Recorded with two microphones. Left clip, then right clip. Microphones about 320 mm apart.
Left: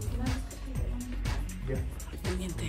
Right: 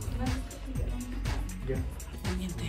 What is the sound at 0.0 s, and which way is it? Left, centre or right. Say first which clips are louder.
Music: right 1 dB; centre.